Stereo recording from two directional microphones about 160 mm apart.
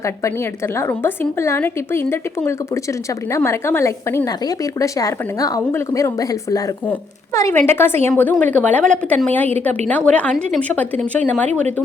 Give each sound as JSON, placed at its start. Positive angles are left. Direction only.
{"t": 0.0, "sound": "a woman's voice", "side_deg": 20}